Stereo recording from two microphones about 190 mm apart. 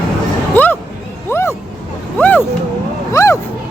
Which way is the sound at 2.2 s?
10° left (ahead or behind).